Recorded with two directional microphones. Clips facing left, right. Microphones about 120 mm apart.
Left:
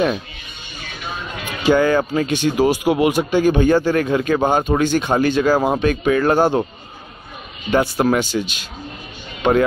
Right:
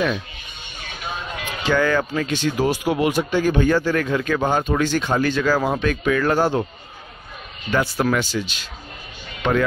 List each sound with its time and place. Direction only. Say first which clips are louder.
1.6 s speech: left 5 dB; 15° left (ahead or behind)
7.7 s speech: left 4 dB; 20° left (ahead or behind)